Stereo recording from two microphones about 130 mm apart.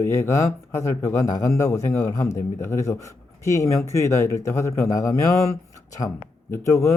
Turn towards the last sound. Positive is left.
turn(degrees=20)  # may be behind; listen again after turning